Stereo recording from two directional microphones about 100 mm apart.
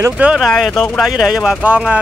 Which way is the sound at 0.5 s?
5° left (ahead or behind).